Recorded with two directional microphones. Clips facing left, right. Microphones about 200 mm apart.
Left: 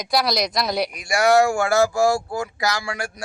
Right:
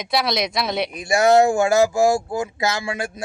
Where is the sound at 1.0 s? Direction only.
25° right (ahead or behind).